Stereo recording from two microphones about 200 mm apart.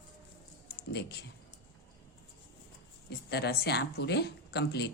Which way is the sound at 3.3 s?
55° left (ahead or behind).